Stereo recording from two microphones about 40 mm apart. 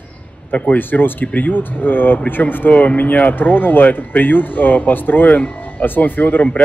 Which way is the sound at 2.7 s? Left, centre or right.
Left.